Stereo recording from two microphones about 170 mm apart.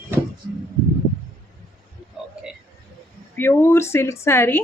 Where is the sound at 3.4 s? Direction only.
15° left (ahead or behind).